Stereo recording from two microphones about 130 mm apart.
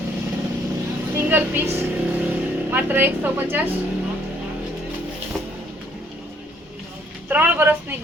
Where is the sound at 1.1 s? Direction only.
15° right (ahead or behind).